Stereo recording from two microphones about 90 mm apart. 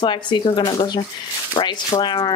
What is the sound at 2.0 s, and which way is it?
Speech, 55° left (ahead or behind).